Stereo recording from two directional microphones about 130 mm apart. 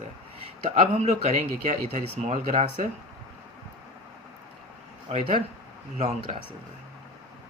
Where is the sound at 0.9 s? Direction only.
60° right (ahead or behind).